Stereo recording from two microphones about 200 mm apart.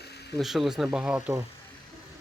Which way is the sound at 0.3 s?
Centre (ahead or behind).